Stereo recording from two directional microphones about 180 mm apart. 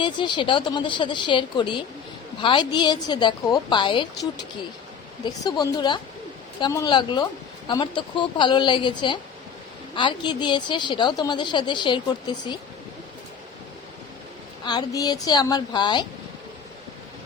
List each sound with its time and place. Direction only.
0.0 s a woman's voice: 25° left (ahead or behind)
5.2 s a woman's voice: 20° left (ahead or behind)
14.6 s a woman's voice: 25° left (ahead or behind)